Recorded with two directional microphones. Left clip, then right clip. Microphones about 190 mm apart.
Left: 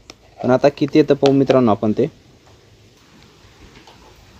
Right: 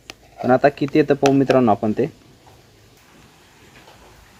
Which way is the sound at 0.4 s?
15° left (ahead or behind).